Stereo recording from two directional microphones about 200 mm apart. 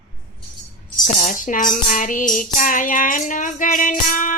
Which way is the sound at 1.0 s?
40° left (ahead or behind).